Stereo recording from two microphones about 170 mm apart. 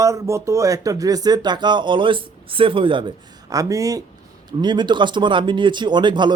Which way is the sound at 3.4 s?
20° right (ahead or behind).